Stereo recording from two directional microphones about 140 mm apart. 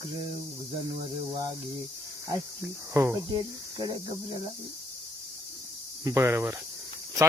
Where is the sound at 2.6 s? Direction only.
20° right (ahead or behind).